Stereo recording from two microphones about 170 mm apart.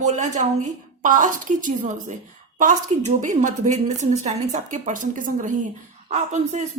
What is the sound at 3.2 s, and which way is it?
A woman's voice, 45° right (ahead or behind).